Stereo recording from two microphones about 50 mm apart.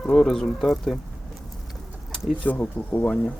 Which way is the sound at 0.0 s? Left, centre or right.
Centre.